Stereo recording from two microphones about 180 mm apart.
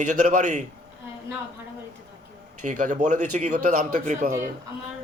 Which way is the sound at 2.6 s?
45° right (ahead or behind).